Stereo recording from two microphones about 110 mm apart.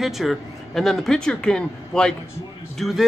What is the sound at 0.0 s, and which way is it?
Speech, centre (ahead or behind).